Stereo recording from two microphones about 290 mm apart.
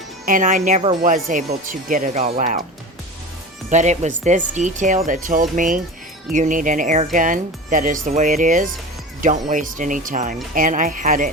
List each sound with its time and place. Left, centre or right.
0.3 s speech: right
3.7 s speech: right